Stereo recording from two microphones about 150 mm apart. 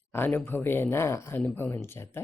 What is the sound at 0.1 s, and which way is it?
Speech, 15° left (ahead or behind).